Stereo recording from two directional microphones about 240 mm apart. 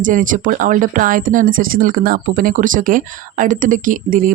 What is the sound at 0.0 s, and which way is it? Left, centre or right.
Speech, right.